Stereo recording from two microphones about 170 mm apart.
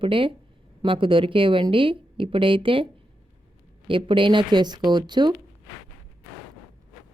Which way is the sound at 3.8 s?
30° right (ahead or behind).